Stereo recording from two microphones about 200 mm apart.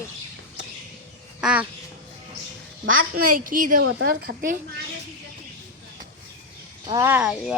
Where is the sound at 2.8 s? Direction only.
90° right.